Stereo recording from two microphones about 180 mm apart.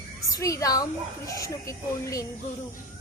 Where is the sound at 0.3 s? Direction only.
20° left (ahead or behind).